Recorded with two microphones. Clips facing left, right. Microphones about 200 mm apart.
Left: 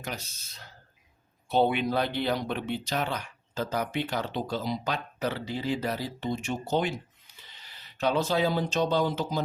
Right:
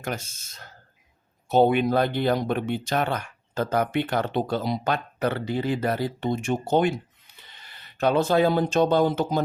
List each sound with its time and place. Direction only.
0.0 s speech: 50° right (ahead or behind)